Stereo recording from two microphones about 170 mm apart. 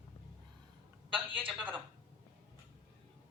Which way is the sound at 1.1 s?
30° right (ahead or behind).